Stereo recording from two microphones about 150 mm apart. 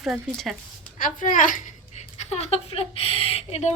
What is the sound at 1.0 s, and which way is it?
Speech, 65° left (ahead or behind).